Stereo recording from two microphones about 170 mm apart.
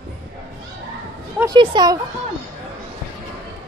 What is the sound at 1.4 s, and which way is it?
Speech, 25° right (ahead or behind).